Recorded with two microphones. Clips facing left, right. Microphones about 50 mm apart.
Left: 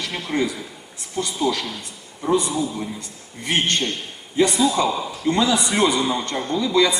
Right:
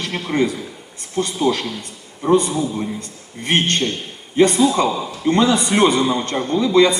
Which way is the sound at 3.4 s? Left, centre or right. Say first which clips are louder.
Right 3 dB; right.